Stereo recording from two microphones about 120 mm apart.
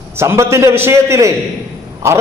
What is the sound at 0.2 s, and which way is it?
A man's voice, 20° right (ahead or behind).